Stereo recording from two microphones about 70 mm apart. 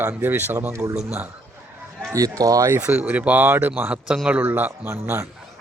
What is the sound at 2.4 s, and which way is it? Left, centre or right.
Speech, right.